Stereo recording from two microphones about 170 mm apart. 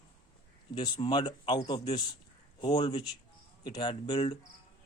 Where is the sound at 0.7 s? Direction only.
25° left (ahead or behind).